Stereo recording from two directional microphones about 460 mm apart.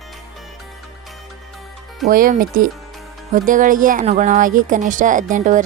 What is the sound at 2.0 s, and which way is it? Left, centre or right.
Speech, centre.